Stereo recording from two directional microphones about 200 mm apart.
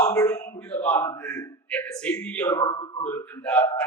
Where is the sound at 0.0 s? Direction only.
10° left (ahead or behind).